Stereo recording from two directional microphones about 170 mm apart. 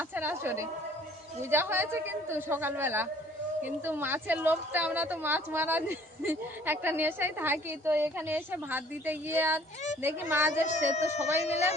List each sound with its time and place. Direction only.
0.1 s a sound: 10° right (ahead or behind)
1.4 s a woman's voice: 15° right (ahead or behind)
10.5 s speech: 45° left (ahead or behind)